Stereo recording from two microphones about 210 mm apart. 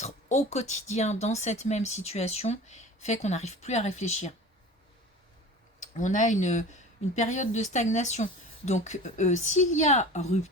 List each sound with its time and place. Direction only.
0.0 s speech: 35° left (ahead or behind)
5.8 s speech: 35° left (ahead or behind)